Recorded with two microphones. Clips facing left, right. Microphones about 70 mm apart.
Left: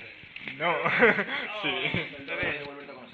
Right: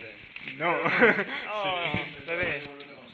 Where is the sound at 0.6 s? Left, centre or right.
Centre.